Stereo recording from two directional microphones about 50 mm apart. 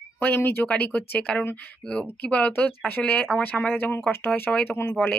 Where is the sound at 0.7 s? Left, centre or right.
Left.